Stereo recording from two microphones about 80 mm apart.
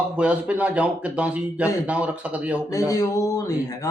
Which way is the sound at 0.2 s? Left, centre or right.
Centre.